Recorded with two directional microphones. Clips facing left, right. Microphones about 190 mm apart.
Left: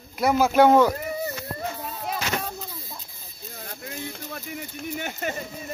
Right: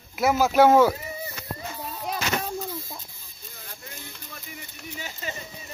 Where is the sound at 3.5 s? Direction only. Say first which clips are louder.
Left 7 dB; 55° left (ahead or behind).